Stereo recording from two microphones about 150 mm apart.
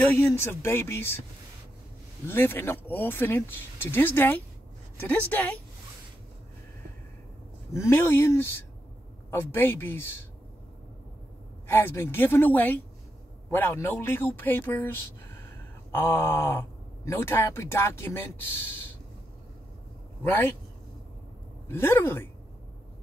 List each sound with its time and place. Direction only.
0.1 s speech: 15° left (ahead or behind)
2.2 s a woman's voice: 15° left (ahead or behind)
7.7 s speech: 20° left (ahead or behind)
11.6 s speech: 15° left (ahead or behind)
21.6 s speech: 15° left (ahead or behind)